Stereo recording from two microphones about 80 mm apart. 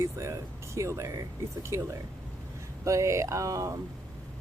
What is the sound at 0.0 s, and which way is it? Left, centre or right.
Speech, right.